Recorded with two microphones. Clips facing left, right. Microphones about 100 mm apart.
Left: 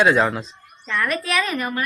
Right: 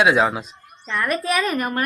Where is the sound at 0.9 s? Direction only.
35° right (ahead or behind).